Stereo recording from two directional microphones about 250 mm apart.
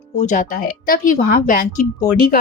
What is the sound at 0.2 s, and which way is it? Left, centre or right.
A woman's voice, left.